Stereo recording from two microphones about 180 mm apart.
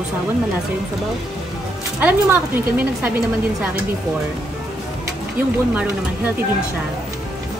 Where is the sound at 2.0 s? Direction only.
10° right (ahead or behind).